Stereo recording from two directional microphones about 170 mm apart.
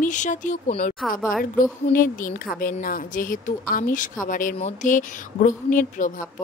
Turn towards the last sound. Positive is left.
turn(degrees=50)  # may be behind; listen again after turning